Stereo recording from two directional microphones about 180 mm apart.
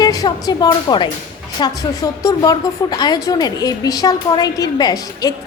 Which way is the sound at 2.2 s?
20° left (ahead or behind).